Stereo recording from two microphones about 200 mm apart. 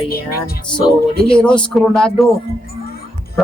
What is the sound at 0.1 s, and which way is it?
Speech, 50° left (ahead or behind).